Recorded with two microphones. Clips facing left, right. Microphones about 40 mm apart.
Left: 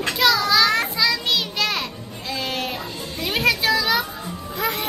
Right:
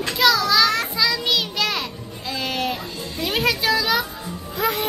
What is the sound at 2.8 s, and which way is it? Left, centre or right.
Children playing, left.